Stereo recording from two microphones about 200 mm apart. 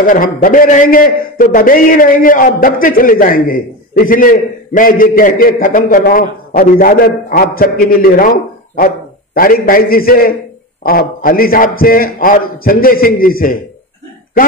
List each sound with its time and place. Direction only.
0.0 s a man's voice: 45° left (ahead or behind)